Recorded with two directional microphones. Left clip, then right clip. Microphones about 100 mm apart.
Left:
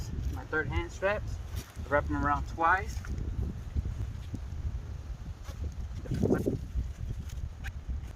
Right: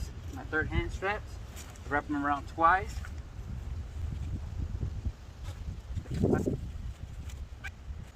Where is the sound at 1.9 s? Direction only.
20° right (ahead or behind).